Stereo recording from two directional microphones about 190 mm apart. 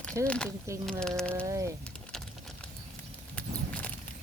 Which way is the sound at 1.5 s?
15° right (ahead or behind).